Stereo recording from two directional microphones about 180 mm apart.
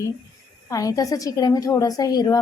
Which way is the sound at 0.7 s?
20° left (ahead or behind).